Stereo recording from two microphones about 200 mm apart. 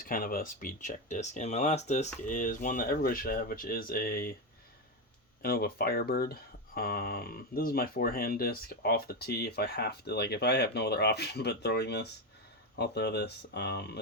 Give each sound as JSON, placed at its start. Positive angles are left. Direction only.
{"t": 0.0, "sound": "speech", "side_deg": 45}
{"t": 5.4, "sound": "speech", "side_deg": 50}